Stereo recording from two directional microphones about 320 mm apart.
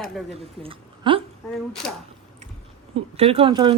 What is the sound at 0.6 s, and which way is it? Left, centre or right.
Speech, centre.